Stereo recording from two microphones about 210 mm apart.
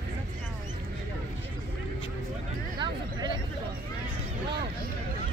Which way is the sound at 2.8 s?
20° right (ahead or behind).